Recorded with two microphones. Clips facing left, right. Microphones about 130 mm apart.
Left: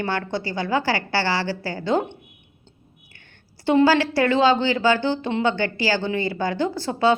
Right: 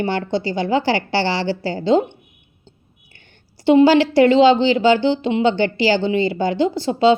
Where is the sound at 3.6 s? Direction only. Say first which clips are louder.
Right 5 dB; 20° right (ahead or behind).